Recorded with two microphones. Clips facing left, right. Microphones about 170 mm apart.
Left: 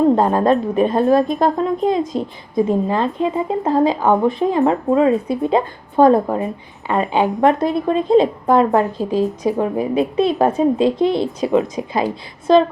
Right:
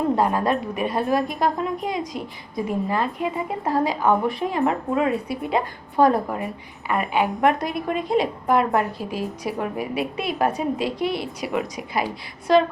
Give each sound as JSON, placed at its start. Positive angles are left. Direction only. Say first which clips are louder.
{"t": 0.2, "sound": "a woman's voice", "louder": "left 6 dB", "side_deg": 30}